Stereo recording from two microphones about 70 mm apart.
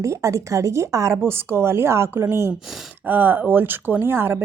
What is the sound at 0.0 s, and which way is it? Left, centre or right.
Speech, right.